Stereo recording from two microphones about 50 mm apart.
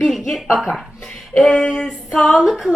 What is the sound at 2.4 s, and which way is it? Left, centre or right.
Speech, centre.